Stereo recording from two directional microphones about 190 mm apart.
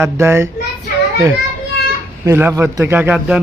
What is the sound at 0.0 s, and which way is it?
Speech, 15° right (ahead or behind).